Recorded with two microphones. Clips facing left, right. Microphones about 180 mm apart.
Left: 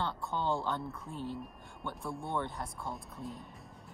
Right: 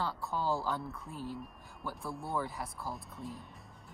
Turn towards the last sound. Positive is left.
turn(degrees=0)  # may be behind; listen again after turning